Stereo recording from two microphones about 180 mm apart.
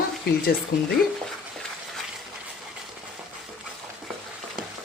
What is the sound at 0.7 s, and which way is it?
Speech, 55° left (ahead or behind).